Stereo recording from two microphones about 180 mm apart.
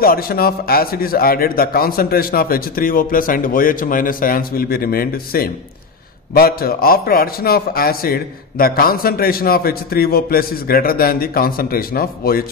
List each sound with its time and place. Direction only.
0.0 s a man's voice: 55° left (ahead or behind)